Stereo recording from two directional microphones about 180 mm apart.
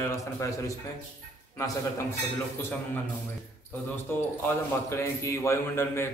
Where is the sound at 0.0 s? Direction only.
15° left (ahead or behind).